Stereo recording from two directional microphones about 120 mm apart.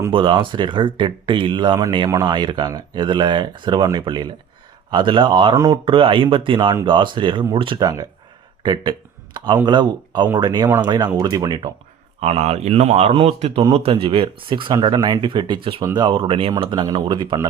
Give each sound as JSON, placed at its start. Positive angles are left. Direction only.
{"t": 0.1, "sound": "speech", "side_deg": -40}
{"t": 5.5, "sound": "speech", "side_deg": -30}
{"t": 5.8, "sound": "speech", "side_deg": -45}
{"t": 7.8, "sound": "speech", "side_deg": -30}
{"t": 12.2, "sound": "speech", "side_deg": -60}